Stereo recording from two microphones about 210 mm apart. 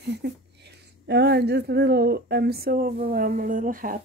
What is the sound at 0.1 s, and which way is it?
Speech, 55° right (ahead or behind).